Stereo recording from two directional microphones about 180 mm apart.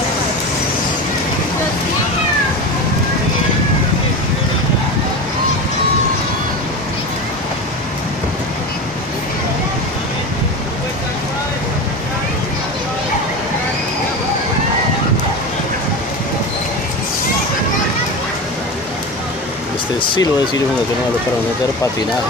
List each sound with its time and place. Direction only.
20.0 s speech: 25° left (ahead or behind)